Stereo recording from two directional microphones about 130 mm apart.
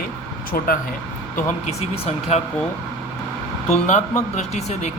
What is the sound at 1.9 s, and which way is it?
Speech, 55° left (ahead or behind).